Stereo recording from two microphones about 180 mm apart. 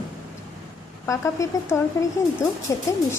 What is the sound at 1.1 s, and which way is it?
A woman's voice, 15° left (ahead or behind).